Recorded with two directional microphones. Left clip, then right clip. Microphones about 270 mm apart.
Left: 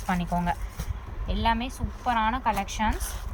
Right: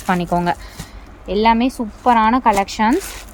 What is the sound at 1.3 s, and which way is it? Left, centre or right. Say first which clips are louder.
Speech: right 12 dB; centre.